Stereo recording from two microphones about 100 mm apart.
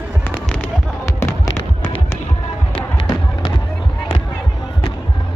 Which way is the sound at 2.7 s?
50° left (ahead or behind).